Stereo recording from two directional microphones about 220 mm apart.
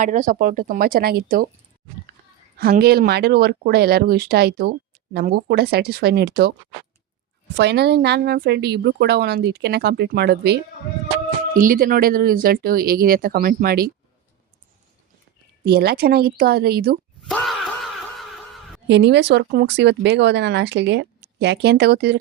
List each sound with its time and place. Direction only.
0.0 s speech: 35° right (ahead or behind)
2.6 s speech: 45° right (ahead or behind)
7.5 s speech: 50° right (ahead or behind)
15.6 s speech: 45° right (ahead or behind)
17.2 s a sound: centre (ahead or behind)
18.9 s speech: 50° right (ahead or behind)